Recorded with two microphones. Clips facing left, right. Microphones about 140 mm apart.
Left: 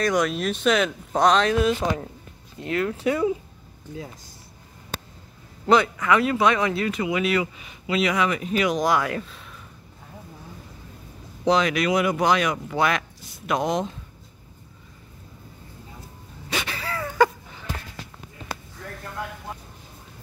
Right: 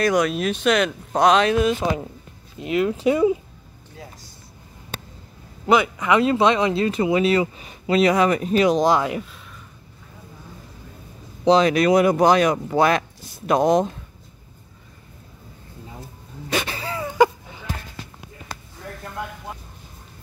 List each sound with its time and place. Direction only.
0.0 s speech: 5° right (ahead or behind)
2.6 s speech: 15° right (ahead or behind)
5.7 s speech: 15° right (ahead or behind)
11.4 s speech: 30° right (ahead or behind)
16.6 s a sound: 25° right (ahead or behind)